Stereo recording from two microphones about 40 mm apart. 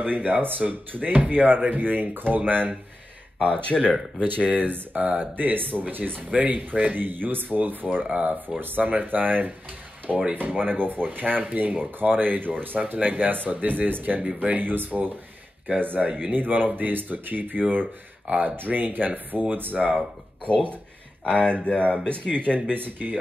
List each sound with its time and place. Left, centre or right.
0.0 s speech: right
3.5 s speech: left
4.6 s speech: right
6.3 s speech: right
8.1 s speech: right
8.5 s speech: right
14.2 s speech: right
14.6 s speech: right
16.1 s speech: right
19.8 s speech: right
21.2 s speech: left
22.7 s speech: right